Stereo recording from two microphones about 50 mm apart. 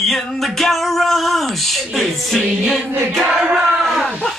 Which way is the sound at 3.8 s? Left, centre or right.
Centre.